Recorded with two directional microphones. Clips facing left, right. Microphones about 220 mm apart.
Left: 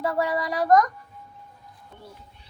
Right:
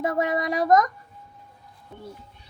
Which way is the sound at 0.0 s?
20° right (ahead or behind).